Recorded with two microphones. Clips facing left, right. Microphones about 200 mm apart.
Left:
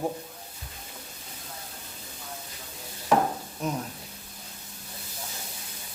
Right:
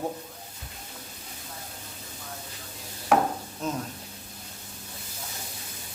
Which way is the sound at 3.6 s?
15° left (ahead or behind).